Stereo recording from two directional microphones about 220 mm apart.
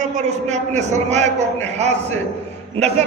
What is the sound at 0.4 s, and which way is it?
A man's voice, 30° right (ahead or behind).